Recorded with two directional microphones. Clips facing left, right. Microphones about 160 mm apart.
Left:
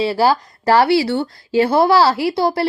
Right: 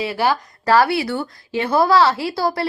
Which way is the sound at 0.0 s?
30° left (ahead or behind).